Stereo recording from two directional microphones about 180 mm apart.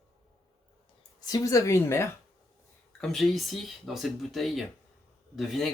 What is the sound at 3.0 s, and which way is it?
Speech, centre (ahead or behind).